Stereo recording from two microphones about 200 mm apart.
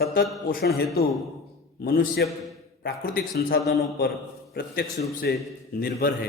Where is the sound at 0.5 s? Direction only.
50° left (ahead or behind).